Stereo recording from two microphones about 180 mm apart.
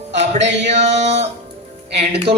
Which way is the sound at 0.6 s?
40° right (ahead or behind).